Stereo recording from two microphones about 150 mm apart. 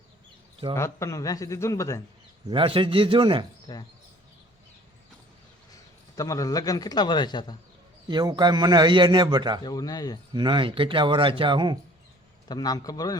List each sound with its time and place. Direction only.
0.8 s a man's voice: 20° left (ahead or behind)
2.5 s speech: 35° right (ahead or behind)
6.1 s a man's voice: 20° left (ahead or behind)
8.0 s a man's voice: 30° right (ahead or behind)
9.6 s a man's voice: 25° left (ahead or behind)
10.3 s speech: 30° right (ahead or behind)
12.5 s a man's voice: 25° left (ahead or behind)